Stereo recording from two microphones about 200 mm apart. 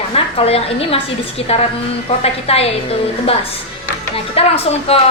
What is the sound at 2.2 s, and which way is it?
Speech, 30° left (ahead or behind).